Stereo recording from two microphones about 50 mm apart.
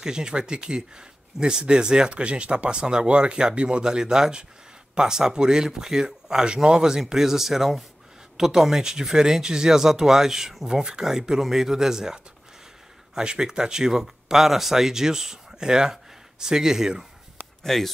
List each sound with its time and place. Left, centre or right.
0.0 s speech: centre
17.7 s speech: centre